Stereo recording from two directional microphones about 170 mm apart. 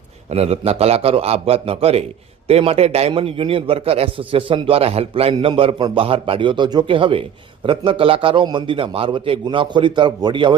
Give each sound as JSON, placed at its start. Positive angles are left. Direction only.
{"t": 0.3, "sound": "a man's voice", "side_deg": -35}